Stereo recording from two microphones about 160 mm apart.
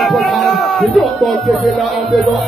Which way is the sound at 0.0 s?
Centre (ahead or behind).